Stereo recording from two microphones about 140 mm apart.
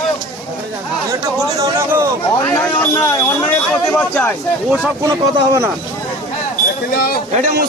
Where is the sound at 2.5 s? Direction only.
15° left (ahead or behind).